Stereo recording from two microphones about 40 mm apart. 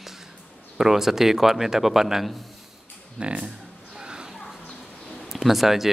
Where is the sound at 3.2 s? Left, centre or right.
Right.